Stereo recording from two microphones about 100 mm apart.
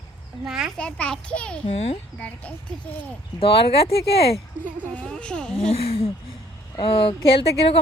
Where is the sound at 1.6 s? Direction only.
85° left.